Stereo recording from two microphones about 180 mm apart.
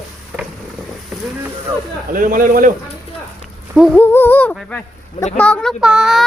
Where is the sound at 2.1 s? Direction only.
50° right (ahead or behind).